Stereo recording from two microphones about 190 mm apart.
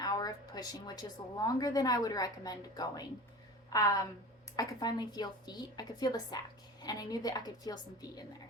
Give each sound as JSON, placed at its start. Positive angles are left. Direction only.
{"t": 0.0, "sound": "a woman's voice", "side_deg": 20}